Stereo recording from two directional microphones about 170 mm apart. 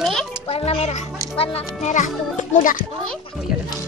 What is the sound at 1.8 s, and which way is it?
Speech, 45° left (ahead or behind).